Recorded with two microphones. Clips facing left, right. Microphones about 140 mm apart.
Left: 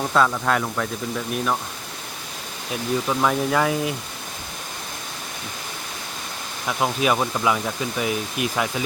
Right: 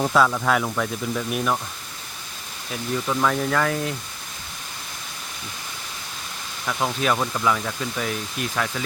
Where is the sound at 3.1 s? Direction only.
15° left (ahead or behind).